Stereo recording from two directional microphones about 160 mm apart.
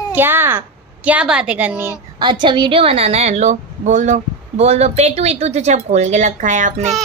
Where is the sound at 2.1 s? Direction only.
30° right (ahead or behind); by 6.9 s 50° right (ahead or behind).